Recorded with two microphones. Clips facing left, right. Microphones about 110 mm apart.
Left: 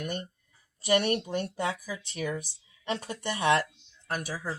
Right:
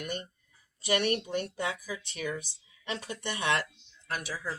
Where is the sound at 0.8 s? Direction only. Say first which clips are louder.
Left 3 dB; 40° left (ahead or behind).